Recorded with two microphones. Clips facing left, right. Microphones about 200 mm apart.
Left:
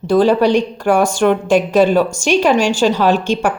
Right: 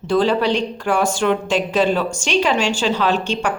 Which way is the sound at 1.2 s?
50° left (ahead or behind).